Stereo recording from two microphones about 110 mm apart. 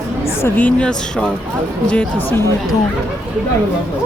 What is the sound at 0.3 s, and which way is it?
A woman's voice, 20° left (ahead or behind).